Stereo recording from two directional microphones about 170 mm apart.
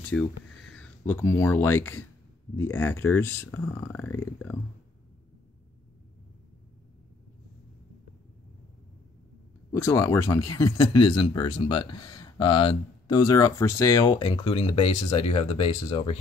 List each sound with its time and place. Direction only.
0.0 s speech: 5° left (ahead or behind)
9.7 s speech: 15° left (ahead or behind); by 16.2 s 35° left (ahead or behind)